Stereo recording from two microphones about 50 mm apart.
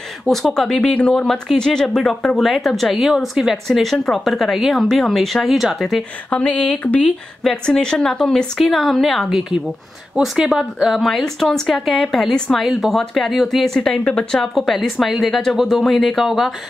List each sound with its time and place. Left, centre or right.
0.2 s speech: centre
6.3 s speech: left
7.0 s speech: centre
10.2 s speech: centre
11.0 s speech: centre
13.7 s speech: centre
14.7 s speech: centre
15.8 s speech: centre